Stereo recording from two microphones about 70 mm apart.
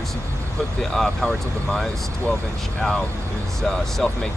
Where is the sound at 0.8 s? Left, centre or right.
Centre.